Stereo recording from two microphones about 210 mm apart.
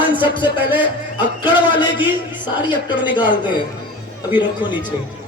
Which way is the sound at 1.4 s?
20° left (ahead or behind).